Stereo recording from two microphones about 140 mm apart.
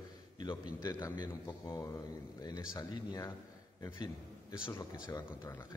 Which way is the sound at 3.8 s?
25° left (ahead or behind).